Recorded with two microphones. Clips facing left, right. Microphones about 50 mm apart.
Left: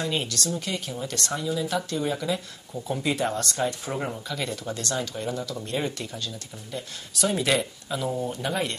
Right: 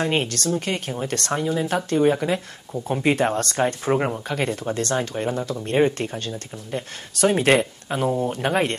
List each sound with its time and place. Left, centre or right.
0.0 s speech: right